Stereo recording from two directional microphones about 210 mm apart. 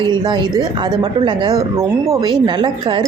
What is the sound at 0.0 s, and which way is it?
Speech, 20° right (ahead or behind).